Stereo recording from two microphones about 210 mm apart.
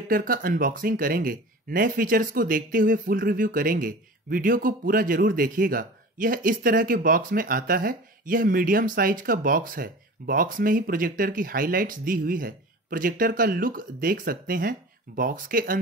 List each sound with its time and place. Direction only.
0.1 s speech: 40° right (ahead or behind)